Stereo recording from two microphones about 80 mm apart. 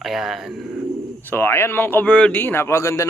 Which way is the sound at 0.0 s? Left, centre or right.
Centre.